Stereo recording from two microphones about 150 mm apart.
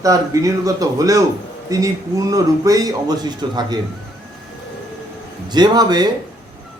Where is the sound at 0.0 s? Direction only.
20° right (ahead or behind).